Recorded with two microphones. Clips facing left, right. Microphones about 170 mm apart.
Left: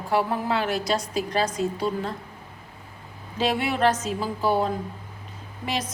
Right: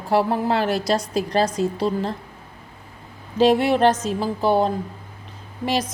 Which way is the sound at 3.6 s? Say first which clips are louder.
Right 5 dB; 30° right (ahead or behind).